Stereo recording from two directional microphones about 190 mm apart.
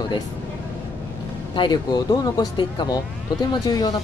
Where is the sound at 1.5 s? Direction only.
20° left (ahead or behind).